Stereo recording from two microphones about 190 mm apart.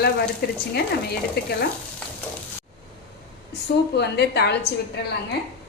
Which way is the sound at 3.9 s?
60° left (ahead or behind).